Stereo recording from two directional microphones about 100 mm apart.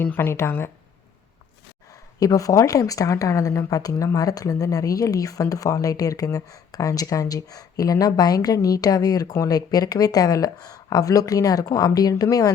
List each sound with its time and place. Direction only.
0.0 s speech: 20° left (ahead or behind)
2.1 s speech: 35° left (ahead or behind)